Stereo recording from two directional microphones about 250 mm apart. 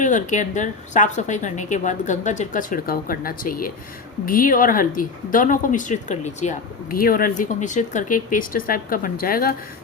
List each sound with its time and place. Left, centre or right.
0.0 s a woman's voice: left